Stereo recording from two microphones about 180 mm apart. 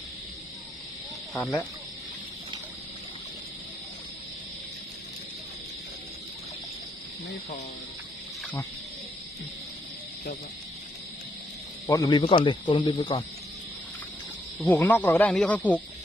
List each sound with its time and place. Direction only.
1.3 s speech: centre (ahead or behind)
11.9 s speech: 20° left (ahead or behind)
14.6 s speech: 10° left (ahead or behind)